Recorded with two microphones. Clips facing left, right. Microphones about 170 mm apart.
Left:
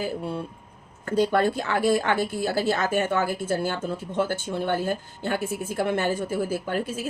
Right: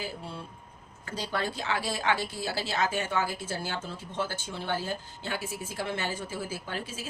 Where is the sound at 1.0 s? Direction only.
55° left (ahead or behind).